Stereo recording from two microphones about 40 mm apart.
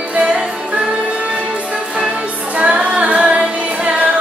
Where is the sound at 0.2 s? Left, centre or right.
Right.